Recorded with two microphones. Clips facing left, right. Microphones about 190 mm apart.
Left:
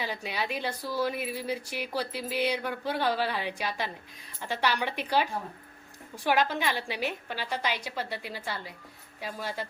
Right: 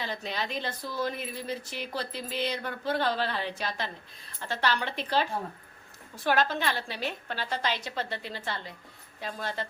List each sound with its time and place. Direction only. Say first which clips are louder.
0.0 s speech: left 1 dB; 10° left (ahead or behind)